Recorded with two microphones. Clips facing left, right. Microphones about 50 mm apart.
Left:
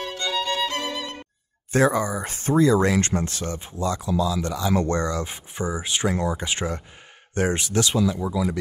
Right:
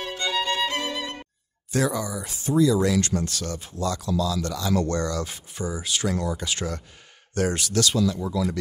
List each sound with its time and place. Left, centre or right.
0.2 s music: centre
1.7 s speech: left; by 8.5 s centre